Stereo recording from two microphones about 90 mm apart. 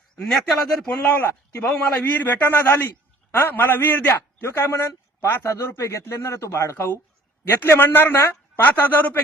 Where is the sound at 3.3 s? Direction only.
20° left (ahead or behind).